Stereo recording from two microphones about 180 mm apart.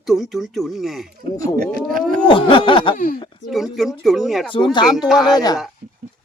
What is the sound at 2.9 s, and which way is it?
Speech, 50° left (ahead or behind).